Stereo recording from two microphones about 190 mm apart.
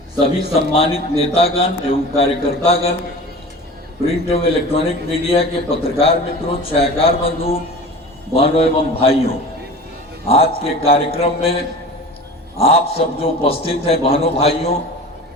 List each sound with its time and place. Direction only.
0.7 s a man's voice: 30° left (ahead or behind)
4.0 s a man's voice: 30° left (ahead or behind)